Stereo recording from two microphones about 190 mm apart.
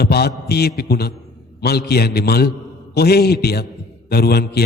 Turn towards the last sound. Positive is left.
turn(degrees=55)  # may be behind; listen again after turning